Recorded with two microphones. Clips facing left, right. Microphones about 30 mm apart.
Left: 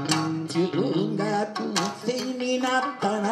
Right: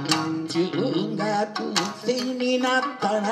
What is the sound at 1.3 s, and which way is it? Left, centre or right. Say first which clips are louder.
Music: right 2 dB; right.